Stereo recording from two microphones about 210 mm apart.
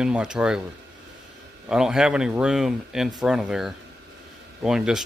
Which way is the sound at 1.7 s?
5° right (ahead or behind).